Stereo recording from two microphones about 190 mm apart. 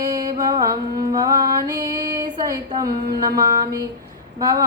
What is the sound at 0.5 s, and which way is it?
Female singing, 20° right (ahead or behind).